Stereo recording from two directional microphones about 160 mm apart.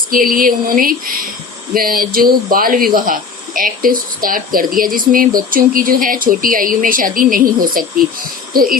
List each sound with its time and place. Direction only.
0.1 s speech: 60° right (ahead or behind)